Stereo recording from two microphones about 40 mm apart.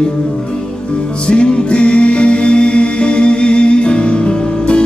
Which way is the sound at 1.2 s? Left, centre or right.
Left.